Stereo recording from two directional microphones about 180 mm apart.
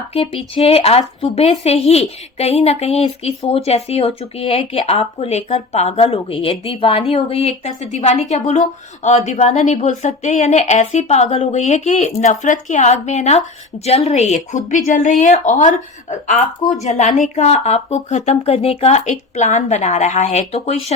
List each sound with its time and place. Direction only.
0.1 s speech: 35° left (ahead or behind)